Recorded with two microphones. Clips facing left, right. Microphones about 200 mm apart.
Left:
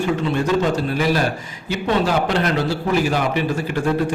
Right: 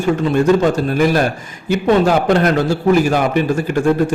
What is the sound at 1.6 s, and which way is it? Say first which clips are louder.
A man's voice: right 7 dB; 50° right (ahead or behind).